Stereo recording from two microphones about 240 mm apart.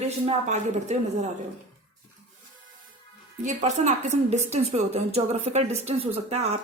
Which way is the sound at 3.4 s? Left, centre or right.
Right.